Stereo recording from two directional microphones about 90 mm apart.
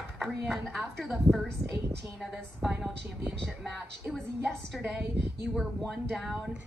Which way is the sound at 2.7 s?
15° right (ahead or behind).